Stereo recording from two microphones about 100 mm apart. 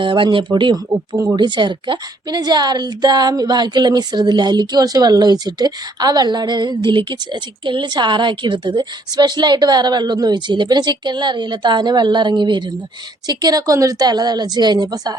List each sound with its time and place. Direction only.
0.0 s speech: 55° right (ahead or behind)
1.1 s speech: 30° right (ahead or behind)
1.4 s speech: 50° right (ahead or behind)